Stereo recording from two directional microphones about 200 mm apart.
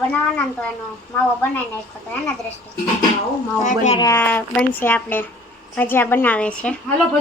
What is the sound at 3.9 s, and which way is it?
Speech, 15° left (ahead or behind).